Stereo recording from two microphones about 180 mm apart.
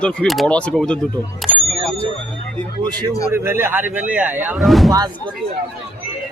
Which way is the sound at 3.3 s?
15° right (ahead or behind).